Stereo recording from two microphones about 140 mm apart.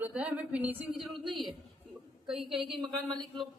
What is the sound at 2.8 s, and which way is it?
Speech, 30° right (ahead or behind).